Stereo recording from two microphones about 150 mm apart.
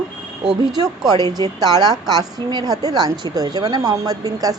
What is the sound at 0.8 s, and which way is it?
A woman's voice, 25° right (ahead or behind).